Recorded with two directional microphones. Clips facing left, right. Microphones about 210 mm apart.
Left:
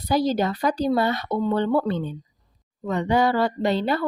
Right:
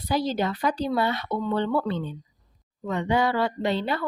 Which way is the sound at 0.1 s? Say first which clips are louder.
Left 4 dB; 40° left (ahead or behind).